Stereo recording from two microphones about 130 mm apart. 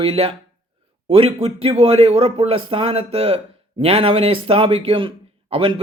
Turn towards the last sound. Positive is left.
turn(degrees=-45)  # may be behind; listen again after turning